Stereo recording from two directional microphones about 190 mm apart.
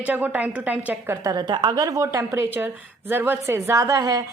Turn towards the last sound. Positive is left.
turn(degrees=-15)  # may be behind; listen again after turning